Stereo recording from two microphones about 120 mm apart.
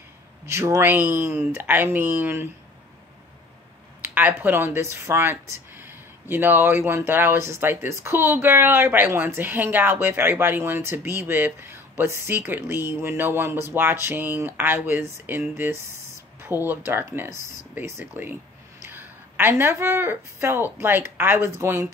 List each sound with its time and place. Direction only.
0.5 s a woman's voice: 20° right (ahead or behind)
4.0 s a woman's voice: 15° right (ahead or behind)